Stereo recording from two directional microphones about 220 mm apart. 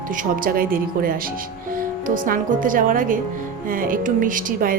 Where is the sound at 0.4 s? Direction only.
40° right (ahead or behind).